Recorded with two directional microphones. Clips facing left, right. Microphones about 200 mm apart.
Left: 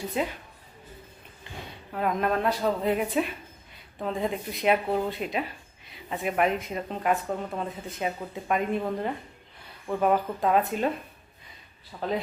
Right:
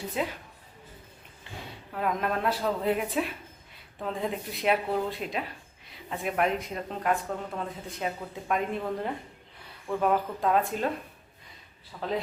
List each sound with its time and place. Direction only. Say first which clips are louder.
0.2 s speech: left 2 dB; centre (ahead or behind)
1.9 s speech: left 3 dB; centre (ahead or behind)
11.9 s a man's voice: left 3 dB; 20° left (ahead or behind)